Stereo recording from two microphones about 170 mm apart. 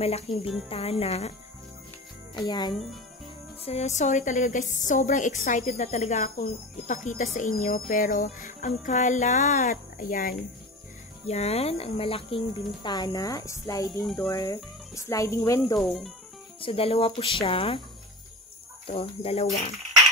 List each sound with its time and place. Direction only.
0.0 s speech: 35° left (ahead or behind)
2.3 s speech: 25° left (ahead or behind)
2.7 s cricket: centre (ahead or behind)
3.6 s a woman's voice: 40° left (ahead or behind)
11.2 s speech: 40° left (ahead or behind); by 14.0 s 20° left (ahead or behind)
14.0 s cricket: centre (ahead or behind)
14.3 s speech: 20° left (ahead or behind)
15.8 s cricket: centre (ahead or behind)
16.6 s speech: 35° left (ahead or behind)
18.9 s speech: 35° left (ahead or behind)